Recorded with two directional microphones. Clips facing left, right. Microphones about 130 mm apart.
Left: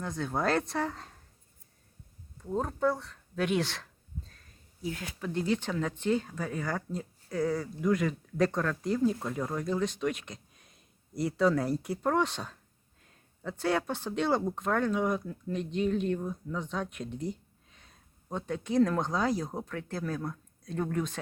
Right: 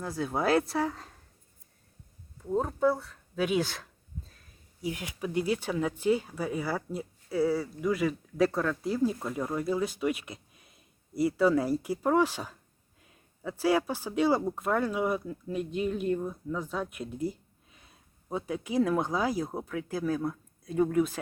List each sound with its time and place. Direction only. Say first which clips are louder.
0.0 s speech: right 1 dB; 5° right (ahead or behind)
2.4 s speech: right 3 dB; 5° right (ahead or behind)
4.8 s speech: right 2 dB; 15° right (ahead or behind)